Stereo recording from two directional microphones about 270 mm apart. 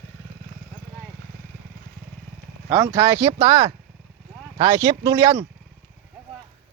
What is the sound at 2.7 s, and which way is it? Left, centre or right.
Speech, centre.